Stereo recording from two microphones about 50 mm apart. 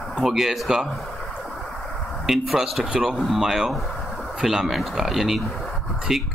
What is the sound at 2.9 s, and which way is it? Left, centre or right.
Speech, centre.